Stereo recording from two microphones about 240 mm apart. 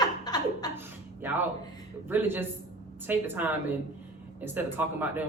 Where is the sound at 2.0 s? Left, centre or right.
Centre.